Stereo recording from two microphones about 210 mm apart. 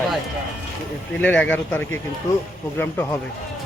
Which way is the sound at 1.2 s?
5° left (ahead or behind).